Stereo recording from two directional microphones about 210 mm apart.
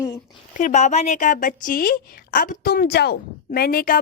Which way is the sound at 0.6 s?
35° left (ahead or behind).